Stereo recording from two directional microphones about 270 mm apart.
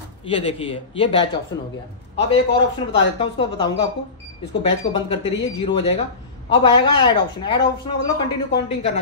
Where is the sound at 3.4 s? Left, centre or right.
Centre.